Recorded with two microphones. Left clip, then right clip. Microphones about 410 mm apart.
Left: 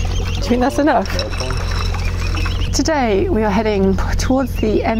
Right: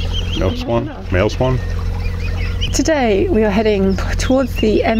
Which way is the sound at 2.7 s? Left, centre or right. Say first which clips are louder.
Right 1 dB; centre.